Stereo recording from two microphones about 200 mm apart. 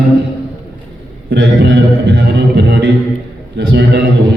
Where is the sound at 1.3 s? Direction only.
50° right (ahead or behind).